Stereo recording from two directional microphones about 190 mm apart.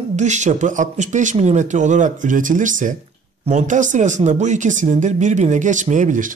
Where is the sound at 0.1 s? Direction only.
40° right (ahead or behind).